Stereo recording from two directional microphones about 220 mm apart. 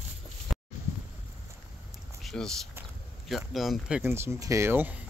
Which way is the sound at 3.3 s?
Centre (ahead or behind).